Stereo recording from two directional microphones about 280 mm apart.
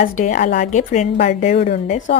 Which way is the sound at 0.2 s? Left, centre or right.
Left.